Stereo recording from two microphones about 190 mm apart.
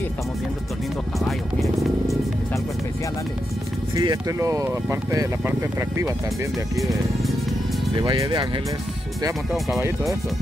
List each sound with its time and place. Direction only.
1.2 s music: centre (ahead or behind)
3.9 s speech: 20° right (ahead or behind)
6.8 s speech: centre (ahead or behind)
8.0 s speech: 20° right (ahead or behind)